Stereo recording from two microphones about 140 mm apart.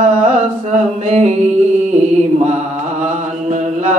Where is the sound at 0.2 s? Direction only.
55° right (ahead or behind).